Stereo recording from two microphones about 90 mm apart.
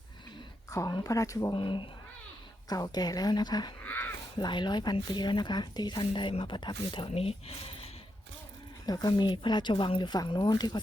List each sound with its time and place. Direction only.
0.9 s speech: 45° left (ahead or behind)
1.5 s speech: 65° left (ahead or behind)
2.6 s speech: 45° left (ahead or behind)
3.8 s a sound: 20° left (ahead or behind)
4.4 s speech: 60° left (ahead or behind); by 7.9 s 90° left
8.9 s speech: 50° left (ahead or behind)